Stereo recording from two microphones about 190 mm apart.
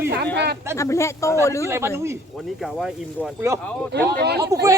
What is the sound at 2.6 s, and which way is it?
Speech, centre (ahead or behind).